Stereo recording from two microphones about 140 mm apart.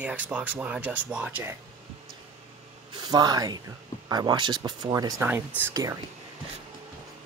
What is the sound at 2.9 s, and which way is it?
Speech, 30° right (ahead or behind).